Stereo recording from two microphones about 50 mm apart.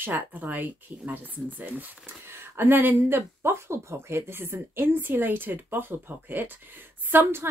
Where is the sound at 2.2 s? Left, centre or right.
Right.